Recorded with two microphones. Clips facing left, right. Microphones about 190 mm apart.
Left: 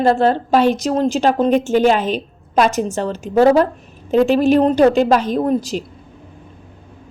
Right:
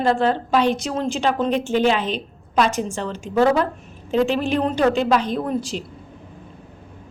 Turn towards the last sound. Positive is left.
turn(degrees=40)  # may be behind; listen again after turning